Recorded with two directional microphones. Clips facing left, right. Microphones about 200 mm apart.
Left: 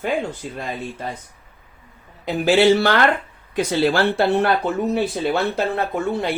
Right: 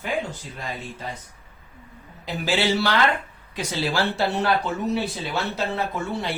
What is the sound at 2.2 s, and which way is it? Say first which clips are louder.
Speech: left 9 dB; 55° left (ahead or behind).